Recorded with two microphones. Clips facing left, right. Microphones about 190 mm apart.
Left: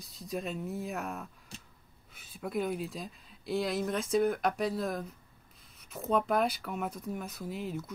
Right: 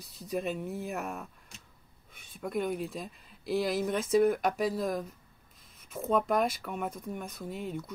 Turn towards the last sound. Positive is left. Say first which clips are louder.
# even
turn(degrees=0)  # may be behind; listen again after turning